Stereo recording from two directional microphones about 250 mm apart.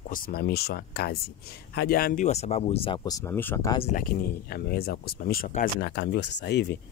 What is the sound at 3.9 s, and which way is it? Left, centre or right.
Speech, left.